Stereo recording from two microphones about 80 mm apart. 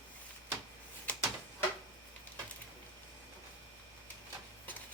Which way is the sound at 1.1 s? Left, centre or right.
Centre.